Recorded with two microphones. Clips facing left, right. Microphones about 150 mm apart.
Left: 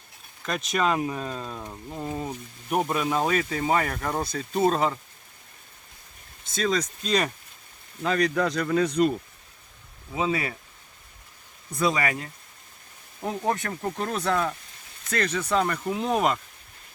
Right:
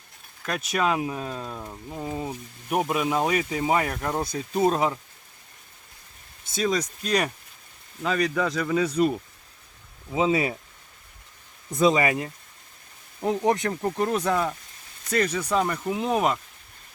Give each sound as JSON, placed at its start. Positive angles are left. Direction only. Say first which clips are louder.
{"t": 0.4, "sound": "speech", "louder": "even", "side_deg": -5}
{"t": 6.4, "sound": "speech", "louder": "right 1 dB", "side_deg": -10}
{"t": 10.1, "sound": "speech", "louder": "right 4 dB", "side_deg": -20}
{"t": 11.7, "sound": "speech", "louder": "right 5 dB", "side_deg": -20}